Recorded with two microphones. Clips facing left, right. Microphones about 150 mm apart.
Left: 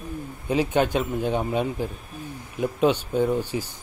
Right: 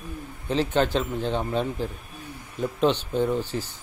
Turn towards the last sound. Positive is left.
turn(degrees=10)  # may be behind; listen again after turning